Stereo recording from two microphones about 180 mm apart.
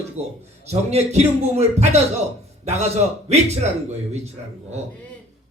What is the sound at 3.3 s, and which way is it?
Speech, 35° right (ahead or behind).